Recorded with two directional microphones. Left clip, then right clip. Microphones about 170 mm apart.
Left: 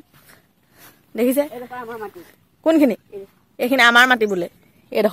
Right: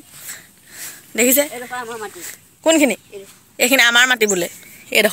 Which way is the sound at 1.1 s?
5° left (ahead or behind).